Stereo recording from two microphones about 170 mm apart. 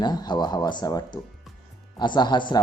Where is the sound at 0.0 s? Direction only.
25° left (ahead or behind).